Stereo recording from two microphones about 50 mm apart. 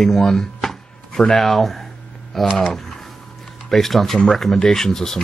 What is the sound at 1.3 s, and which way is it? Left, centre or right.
Speech, centre.